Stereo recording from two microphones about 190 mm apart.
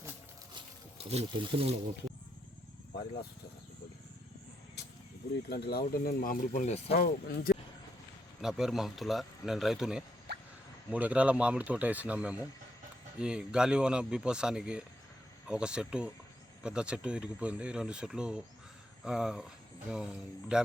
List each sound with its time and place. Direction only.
1.1 s speech: 30° right (ahead or behind)
2.9 s speech: 55° left (ahead or behind)
5.5 s speech: 60° left (ahead or behind); by 6.9 s 35° left (ahead or behind)
6.9 s speech: 55° left (ahead or behind)
8.4 s speech: 5° right (ahead or behind)
10.3 s a sound: 60° right (ahead or behind)
10.9 s speech: 5° right (ahead or behind)